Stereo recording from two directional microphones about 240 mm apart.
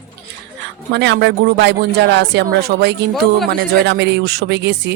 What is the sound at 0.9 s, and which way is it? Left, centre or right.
Speech, right.